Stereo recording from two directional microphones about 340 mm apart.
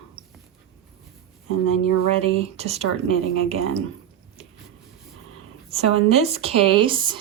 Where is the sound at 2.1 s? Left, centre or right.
Centre.